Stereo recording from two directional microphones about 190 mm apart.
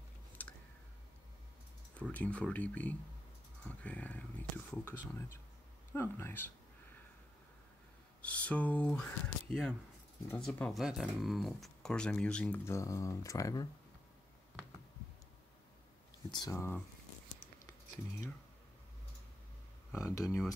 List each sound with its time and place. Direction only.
0.4 s a sound: 10° left (ahead or behind)
2.0 s speech: 5° left (ahead or behind)
3.6 s whispering: 10° left (ahead or behind)
5.9 s speech: 10° left (ahead or behind)
8.2 s speech: 5° left (ahead or behind)
16.3 s speech: 20° left (ahead or behind)
19.9 s speech: 15° left (ahead or behind)